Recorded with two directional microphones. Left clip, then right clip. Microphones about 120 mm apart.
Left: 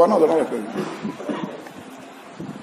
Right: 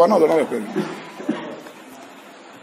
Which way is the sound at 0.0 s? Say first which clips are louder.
Right 1 dB; 45° right (ahead or behind).